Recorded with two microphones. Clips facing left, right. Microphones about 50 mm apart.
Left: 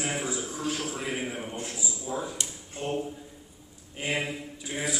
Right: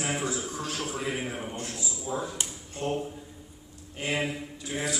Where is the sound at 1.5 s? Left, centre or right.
Centre.